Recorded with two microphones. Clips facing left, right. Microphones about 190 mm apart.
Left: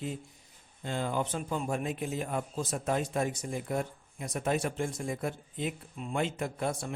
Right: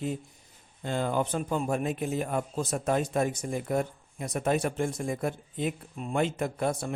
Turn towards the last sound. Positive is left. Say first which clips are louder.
# right 4 dB
turn(degrees=-50)  # may be behind; listen again after turning